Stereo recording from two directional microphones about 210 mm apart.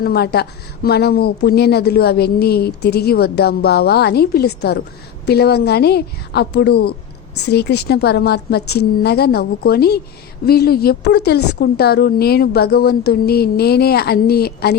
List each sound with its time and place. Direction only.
0.0 s a woman's voice: 50° left (ahead or behind)